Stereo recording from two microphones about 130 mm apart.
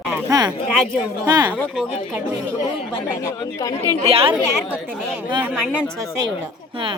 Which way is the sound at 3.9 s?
50° right (ahead or behind).